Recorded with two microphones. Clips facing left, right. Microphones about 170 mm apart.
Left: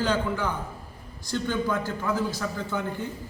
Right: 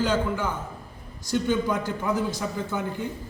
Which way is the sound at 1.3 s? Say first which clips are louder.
Right 3 dB; 15° right (ahead or behind).